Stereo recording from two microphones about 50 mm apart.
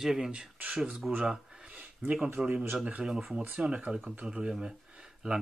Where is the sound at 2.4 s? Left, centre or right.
Centre.